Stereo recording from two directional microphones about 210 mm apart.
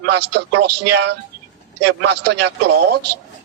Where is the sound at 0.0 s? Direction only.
55° right (ahead or behind).